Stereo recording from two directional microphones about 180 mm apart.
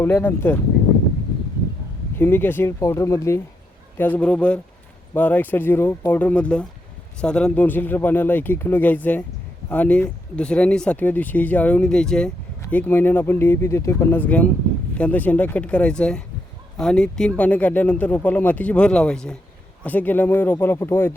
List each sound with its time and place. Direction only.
0.0 s speech: 10° left (ahead or behind)
2.1 s speech: 10° left (ahead or behind)